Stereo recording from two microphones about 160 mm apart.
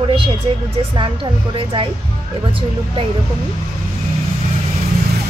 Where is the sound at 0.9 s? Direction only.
30° right (ahead or behind).